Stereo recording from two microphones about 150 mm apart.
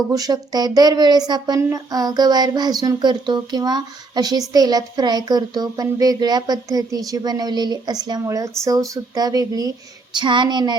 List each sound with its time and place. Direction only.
0.1 s a woman's voice: 25° right (ahead or behind)